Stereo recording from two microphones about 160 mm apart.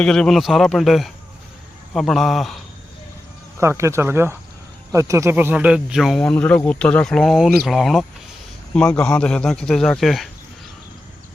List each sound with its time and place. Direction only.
0.0 s a man's voice: 5° left (ahead or behind)
3.6 s a man's voice: 20° right (ahead or behind); by 10.2 s centre (ahead or behind)